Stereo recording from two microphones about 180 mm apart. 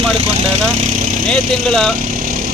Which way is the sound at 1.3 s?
Centre (ahead or behind).